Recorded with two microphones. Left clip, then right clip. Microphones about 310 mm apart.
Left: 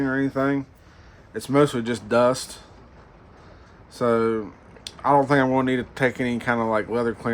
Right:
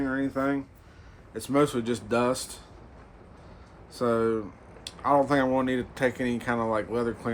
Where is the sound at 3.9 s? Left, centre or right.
Left.